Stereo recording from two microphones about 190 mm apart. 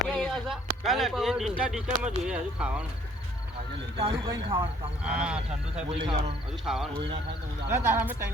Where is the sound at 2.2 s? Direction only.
5° right (ahead or behind).